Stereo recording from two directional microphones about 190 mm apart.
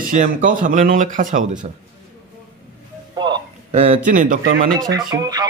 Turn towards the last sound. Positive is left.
turn(degrees=-20)  # may be behind; listen again after turning